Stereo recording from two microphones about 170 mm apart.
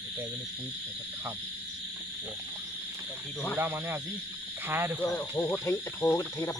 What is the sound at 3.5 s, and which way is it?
Speech, 15° right (ahead or behind).